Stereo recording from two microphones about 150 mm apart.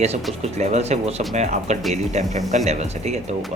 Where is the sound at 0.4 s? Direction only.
45° right (ahead or behind).